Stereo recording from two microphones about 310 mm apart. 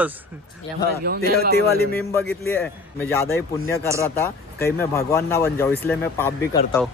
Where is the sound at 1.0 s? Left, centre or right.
Right.